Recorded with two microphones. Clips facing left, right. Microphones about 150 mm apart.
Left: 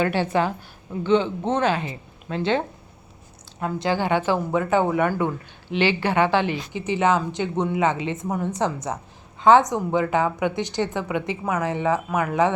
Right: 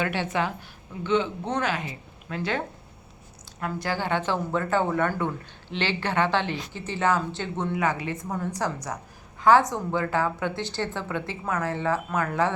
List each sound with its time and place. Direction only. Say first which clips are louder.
0.0 s a woman's voice: left 5 dB; 35° left (ahead or behind); by 12.5 s 15° left (ahead or behind)